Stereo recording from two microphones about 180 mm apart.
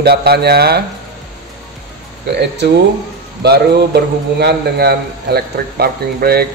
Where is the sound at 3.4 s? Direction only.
65° right (ahead or behind).